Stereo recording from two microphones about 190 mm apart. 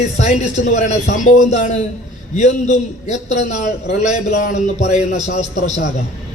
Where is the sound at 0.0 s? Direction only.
35° left (ahead or behind).